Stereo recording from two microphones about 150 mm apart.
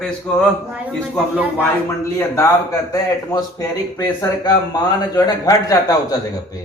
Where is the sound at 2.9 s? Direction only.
25° left (ahead or behind).